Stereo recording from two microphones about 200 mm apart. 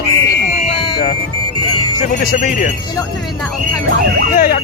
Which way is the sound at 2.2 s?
45° left (ahead or behind).